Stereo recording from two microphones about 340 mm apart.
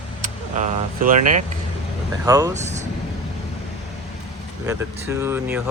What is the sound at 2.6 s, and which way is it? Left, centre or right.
Speech, centre.